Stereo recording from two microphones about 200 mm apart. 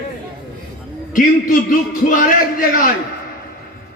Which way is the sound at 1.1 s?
45° left (ahead or behind).